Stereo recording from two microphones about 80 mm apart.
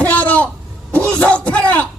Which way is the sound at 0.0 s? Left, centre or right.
Centre.